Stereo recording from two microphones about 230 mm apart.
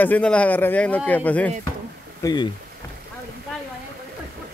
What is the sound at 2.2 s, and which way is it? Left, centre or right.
Speech, centre.